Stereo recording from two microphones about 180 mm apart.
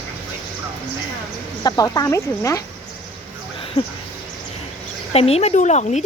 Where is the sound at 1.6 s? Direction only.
20° left (ahead or behind).